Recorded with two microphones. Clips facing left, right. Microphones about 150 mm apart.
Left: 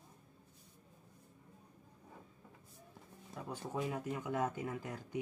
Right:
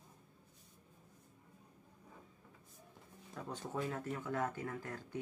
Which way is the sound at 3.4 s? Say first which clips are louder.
Left 1 dB; 10° left (ahead or behind).